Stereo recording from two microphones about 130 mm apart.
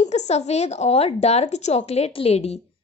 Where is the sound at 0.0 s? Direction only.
60° left (ahead or behind).